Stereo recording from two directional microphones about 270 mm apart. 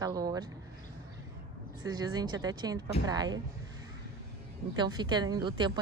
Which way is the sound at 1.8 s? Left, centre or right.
Centre.